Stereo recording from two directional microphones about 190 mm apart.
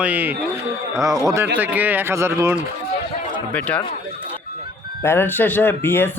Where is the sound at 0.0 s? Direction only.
10° right (ahead or behind).